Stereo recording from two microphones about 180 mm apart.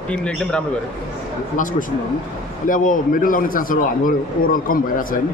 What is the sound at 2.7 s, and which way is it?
A man's voice, 50° left (ahead or behind).